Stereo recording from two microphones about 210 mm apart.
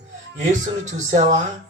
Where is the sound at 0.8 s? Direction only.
35° right (ahead or behind).